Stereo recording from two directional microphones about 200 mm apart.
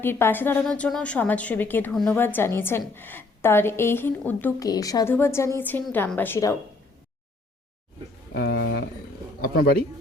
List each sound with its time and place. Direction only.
0.0 s a woman's voice: 10° left (ahead or behind)
8.3 s speech: 55° left (ahead or behind)